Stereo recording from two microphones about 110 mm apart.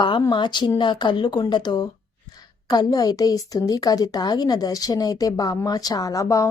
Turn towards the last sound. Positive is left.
turn(degrees=30)  # may be behind; listen again after turning